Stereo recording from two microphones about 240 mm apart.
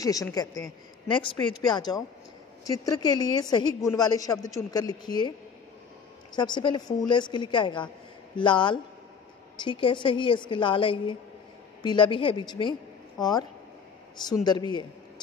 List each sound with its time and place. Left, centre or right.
0.0 s a woman's voice: centre
6.3 s a woman's voice: centre